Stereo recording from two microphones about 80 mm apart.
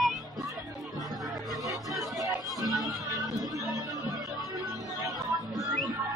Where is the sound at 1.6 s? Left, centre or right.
Right.